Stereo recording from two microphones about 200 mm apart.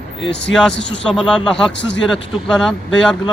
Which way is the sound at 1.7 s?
60° left (ahead or behind).